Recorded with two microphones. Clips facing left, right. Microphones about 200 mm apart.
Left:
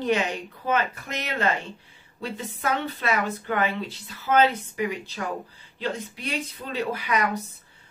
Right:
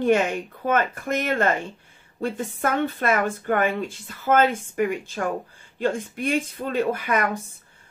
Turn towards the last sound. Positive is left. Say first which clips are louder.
# right 3 dB
turn(degrees=-50)  # may be behind; listen again after turning